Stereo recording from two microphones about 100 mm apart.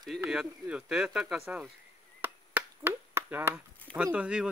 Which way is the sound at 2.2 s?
20° right (ahead or behind).